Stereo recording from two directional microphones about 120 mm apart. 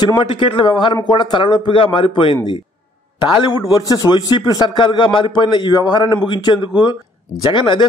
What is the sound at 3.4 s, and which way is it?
A man's voice, 30° left (ahead or behind).